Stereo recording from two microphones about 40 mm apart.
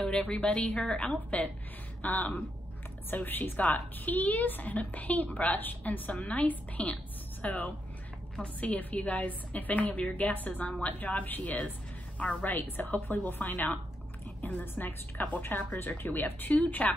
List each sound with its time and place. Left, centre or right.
0.3 s a woman's voice: left
1.3 s a woman's voice: left
6.1 s a woman's voice: left
7.4 s a woman's voice: left
8.4 s a woman's voice: left
8.7 s a woman's voice: left
12.2 s a woman's voice: left
12.4 s a woman's voice: left